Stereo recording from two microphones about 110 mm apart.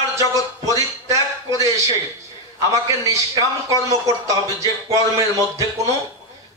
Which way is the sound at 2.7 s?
30° right (ahead or behind).